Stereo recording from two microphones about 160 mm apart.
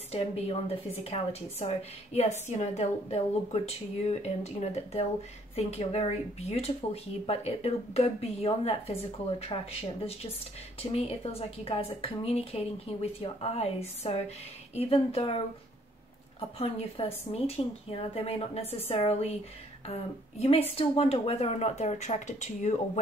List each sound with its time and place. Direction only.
0.1 s a woman's voice: 40° left (ahead or behind)